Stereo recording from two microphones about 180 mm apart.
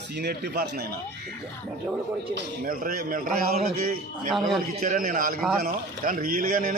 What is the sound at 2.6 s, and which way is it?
A man's voice, 50° right (ahead or behind).